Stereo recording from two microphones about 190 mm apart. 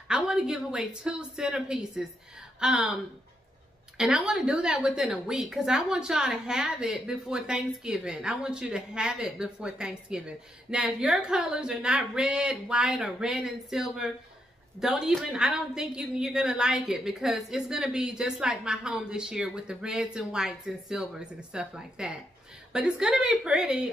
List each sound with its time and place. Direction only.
0.1 s a woman's voice: 5° right (ahead or behind)
4.0 s a woman's voice: 5° right (ahead or behind)